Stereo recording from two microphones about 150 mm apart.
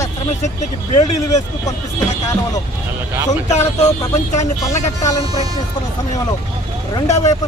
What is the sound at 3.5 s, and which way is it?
Speech, 45° left (ahead or behind).